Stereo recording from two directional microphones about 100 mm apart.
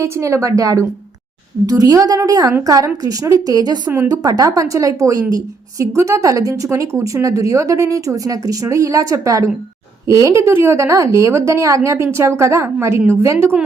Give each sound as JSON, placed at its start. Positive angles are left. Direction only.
{"t": 0.0, "sound": "a woman's voice", "side_deg": -30}